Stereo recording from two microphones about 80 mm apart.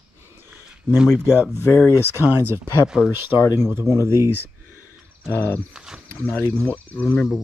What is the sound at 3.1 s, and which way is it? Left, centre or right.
Speech, right.